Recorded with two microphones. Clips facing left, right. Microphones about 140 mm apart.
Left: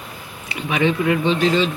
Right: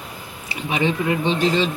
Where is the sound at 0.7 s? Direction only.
55° left (ahead or behind).